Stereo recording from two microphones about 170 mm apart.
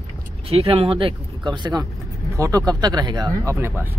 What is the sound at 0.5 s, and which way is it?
Speech, 35° right (ahead or behind).